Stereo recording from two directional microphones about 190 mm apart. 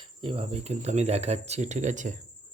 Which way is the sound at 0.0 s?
25° right (ahead or behind).